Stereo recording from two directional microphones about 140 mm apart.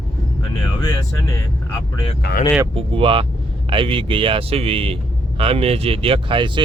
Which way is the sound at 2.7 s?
40° right (ahead or behind).